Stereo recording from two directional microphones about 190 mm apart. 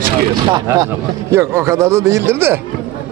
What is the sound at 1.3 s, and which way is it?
Speech, 15° right (ahead or behind).